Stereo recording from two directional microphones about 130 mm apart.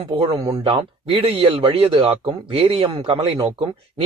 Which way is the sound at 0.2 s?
25° right (ahead or behind).